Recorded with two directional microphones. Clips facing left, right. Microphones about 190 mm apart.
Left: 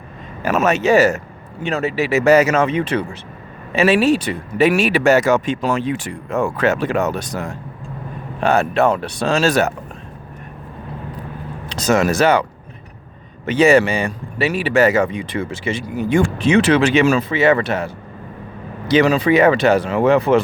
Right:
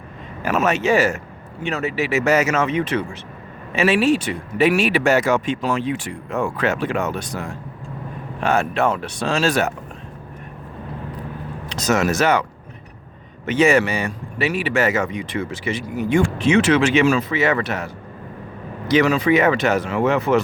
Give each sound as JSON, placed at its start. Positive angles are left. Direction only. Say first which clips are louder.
{"t": 0.4, "sound": "speech", "louder": "left 3 dB", "side_deg": 40}
{"t": 11.7, "sound": "speech", "louder": "left 3 dB", "side_deg": 30}